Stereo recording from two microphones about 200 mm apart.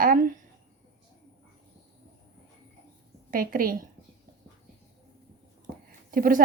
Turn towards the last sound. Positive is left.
turn(degrees=-45)  # may be behind; listen again after turning